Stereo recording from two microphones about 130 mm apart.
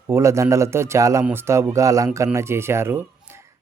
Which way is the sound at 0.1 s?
20° right (ahead or behind).